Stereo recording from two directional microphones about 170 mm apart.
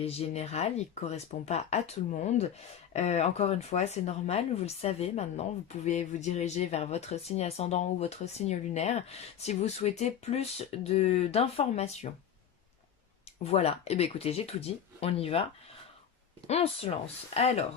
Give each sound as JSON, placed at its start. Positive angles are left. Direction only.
{"t": 0.0, "sound": "speech", "side_deg": 35}
{"t": 2.9, "sound": "speech", "side_deg": 40}
{"t": 13.4, "sound": "speech", "side_deg": 35}
{"t": 16.5, "sound": "speech", "side_deg": 40}